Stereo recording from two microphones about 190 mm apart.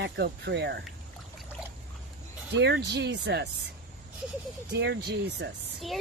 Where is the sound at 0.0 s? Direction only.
60° right (ahead or behind).